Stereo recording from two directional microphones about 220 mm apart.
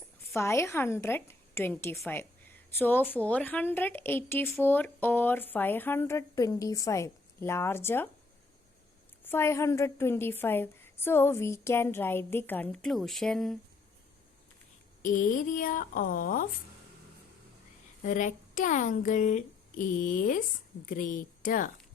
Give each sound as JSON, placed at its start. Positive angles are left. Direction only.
{"t": 0.3, "sound": "speech", "side_deg": 10}
{"t": 9.2, "sound": "speech", "side_deg": 10}
{"t": 15.0, "sound": "a woman's voice", "side_deg": 35}
{"t": 18.0, "sound": "a woman's voice", "side_deg": 35}